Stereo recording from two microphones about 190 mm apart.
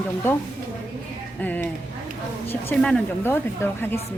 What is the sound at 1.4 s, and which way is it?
A woman's voice, 10° left (ahead or behind).